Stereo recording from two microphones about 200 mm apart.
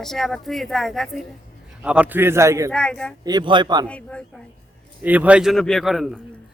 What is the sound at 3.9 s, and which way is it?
Speech, 5° left (ahead or behind).